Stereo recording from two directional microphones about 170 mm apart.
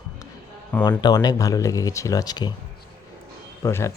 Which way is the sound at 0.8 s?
25° left (ahead or behind).